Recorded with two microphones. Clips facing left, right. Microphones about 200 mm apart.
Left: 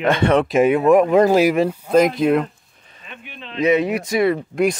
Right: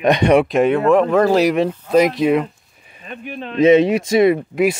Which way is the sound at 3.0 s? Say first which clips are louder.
Right 9 dB; 40° right (ahead or behind).